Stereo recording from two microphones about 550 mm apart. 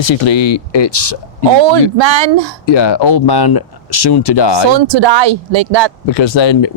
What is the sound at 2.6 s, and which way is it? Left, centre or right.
Speech, left.